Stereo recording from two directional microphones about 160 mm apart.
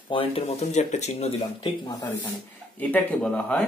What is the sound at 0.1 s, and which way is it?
Speech, 35° left (ahead or behind).